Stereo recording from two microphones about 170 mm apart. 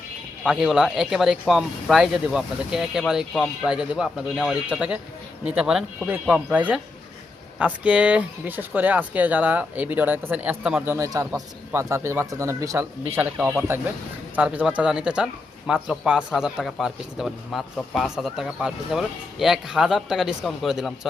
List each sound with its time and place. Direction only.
0.4 s speech: centre (ahead or behind)